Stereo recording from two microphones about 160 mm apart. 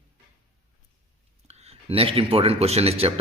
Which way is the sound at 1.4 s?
40° right (ahead or behind).